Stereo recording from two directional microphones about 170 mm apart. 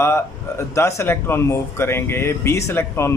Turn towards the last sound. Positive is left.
turn(degrees=15)  # may be behind; listen again after turning